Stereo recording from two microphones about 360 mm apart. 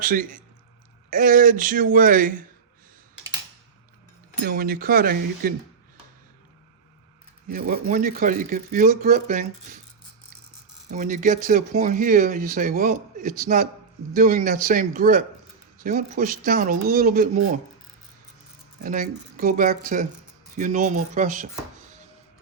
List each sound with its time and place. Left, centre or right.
0.0 s speech: right
4.4 s speech: right
7.4 s speech: right
10.8 s speech: right
18.8 s speech: right